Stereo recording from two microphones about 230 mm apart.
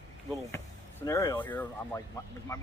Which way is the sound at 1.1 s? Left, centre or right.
Centre.